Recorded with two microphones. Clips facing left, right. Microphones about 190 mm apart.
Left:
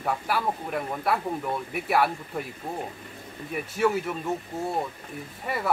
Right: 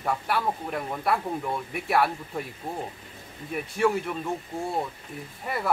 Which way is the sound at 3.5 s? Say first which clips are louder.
Even; centre (ahead or behind).